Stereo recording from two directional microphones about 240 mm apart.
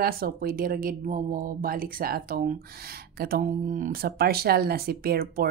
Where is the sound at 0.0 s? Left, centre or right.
Right.